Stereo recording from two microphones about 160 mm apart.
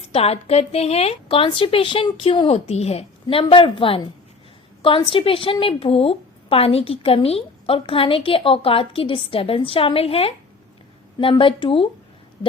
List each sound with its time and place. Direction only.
0.0 s a woman's voice: 40° left (ahead or behind)